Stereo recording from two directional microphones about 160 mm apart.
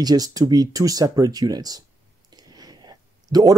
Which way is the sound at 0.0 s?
25° right (ahead or behind).